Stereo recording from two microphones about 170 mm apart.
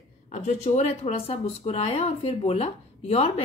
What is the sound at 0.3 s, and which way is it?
Speech, 40° left (ahead or behind).